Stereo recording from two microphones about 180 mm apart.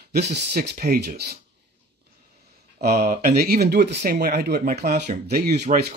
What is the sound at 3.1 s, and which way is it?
Speech, 60° right (ahead or behind).